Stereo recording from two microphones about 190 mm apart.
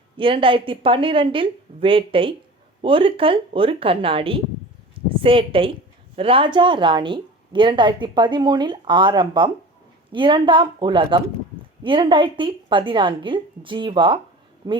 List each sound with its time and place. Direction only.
0.2 s a woman's voice: 25° right (ahead or behind)
4.9 s a sound: 30° right (ahead or behind)
6.1 s a woman's voice: 30° right (ahead or behind)